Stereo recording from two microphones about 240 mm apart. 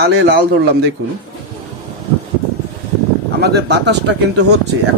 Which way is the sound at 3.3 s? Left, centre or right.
Right.